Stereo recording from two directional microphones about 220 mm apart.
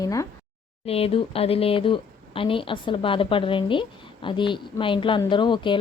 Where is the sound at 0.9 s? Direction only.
25° left (ahead or behind).